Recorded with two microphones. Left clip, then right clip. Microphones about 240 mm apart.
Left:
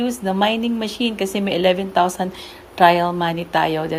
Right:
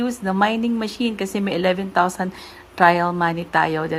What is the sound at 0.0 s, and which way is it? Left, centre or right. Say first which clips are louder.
A woman's voice: left 1 dB; right.